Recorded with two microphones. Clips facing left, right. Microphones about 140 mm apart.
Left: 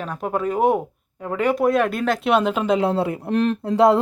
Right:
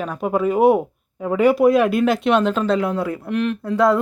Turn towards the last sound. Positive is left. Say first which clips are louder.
# left 1 dB
turn(degrees=25)  # may be behind; listen again after turning